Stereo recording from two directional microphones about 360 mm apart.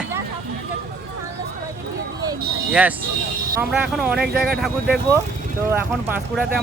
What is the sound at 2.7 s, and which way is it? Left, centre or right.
Speech, centre.